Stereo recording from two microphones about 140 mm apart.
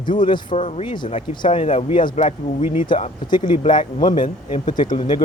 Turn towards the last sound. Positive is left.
turn(degrees=30)  # may be behind; listen again after turning